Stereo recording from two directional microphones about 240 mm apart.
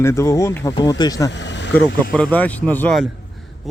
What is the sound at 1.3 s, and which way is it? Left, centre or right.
Speech, left.